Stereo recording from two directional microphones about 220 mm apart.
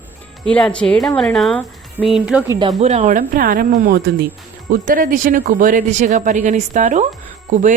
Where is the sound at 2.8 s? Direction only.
30° right (ahead or behind).